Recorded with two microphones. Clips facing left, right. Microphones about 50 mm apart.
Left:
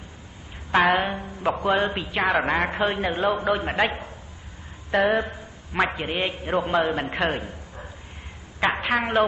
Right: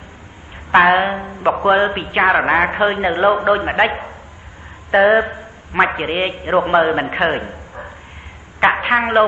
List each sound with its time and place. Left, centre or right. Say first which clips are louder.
0.7 s a woman's voice: right 8 dB; right